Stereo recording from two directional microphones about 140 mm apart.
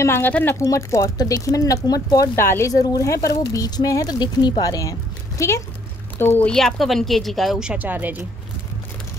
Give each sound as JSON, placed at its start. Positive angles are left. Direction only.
{"t": 0.0, "sound": "speech", "side_deg": 15}
{"t": 6.5, "sound": "speech", "side_deg": 0}